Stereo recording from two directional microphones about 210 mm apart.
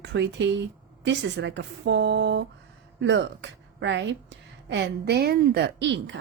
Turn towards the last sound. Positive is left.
turn(degrees=-55)  # may be behind; listen again after turning